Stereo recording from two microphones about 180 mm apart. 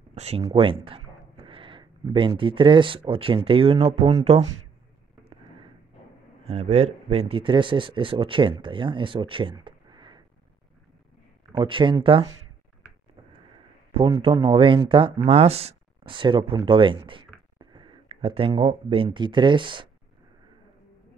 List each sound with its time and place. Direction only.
0.1 s speech: 35° right (ahead or behind)
6.4 s speech: 35° right (ahead or behind)
11.5 s speech: 30° right (ahead or behind)
13.9 s speech: 30° right (ahead or behind)